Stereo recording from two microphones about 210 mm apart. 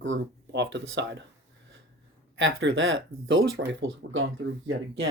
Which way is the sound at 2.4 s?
65° right (ahead or behind).